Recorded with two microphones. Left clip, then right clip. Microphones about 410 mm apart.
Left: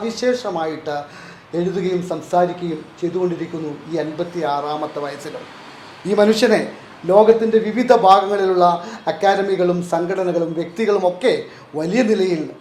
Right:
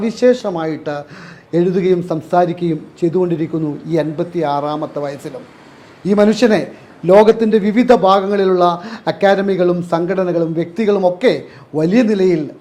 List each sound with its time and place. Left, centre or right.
0.0 s speech: right
3.9 s a man's voice: right